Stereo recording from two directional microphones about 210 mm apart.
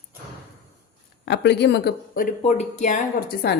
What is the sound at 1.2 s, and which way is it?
A woman's voice, 55° left (ahead or behind).